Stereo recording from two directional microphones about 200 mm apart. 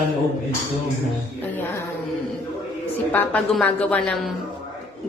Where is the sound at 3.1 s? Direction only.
5° left (ahead or behind).